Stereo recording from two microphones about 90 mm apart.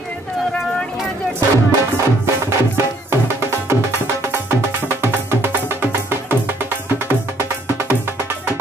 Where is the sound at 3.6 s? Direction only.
30° right (ahead or behind).